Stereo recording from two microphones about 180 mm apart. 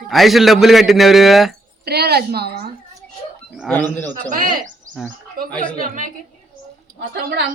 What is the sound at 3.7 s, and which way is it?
Speech, 10° left (ahead or behind).